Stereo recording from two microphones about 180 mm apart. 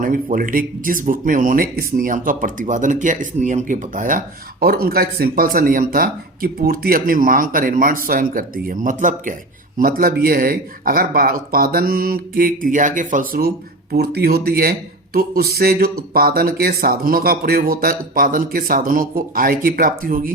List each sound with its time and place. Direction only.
0.0 s speech: 50° right (ahead or behind)
4.6 s speech: 55° right (ahead or behind)
13.9 s speech: 60° right (ahead or behind)